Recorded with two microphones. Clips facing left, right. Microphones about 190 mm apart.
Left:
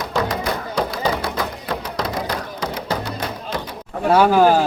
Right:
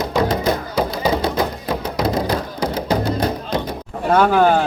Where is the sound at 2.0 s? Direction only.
25° right (ahead or behind).